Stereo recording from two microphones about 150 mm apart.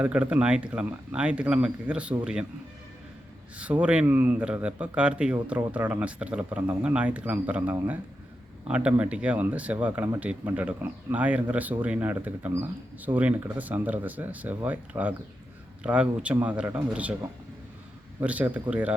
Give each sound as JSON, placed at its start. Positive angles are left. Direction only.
{"t": 0.0, "sound": "speech", "side_deg": -10}
{"t": 3.6, "sound": "speech", "side_deg": -10}
{"t": 18.2, "sound": "speech", "side_deg": -10}